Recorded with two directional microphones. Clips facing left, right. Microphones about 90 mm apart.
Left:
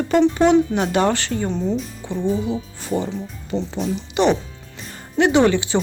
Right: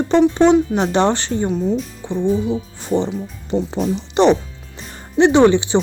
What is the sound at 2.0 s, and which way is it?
Speech, 20° right (ahead or behind).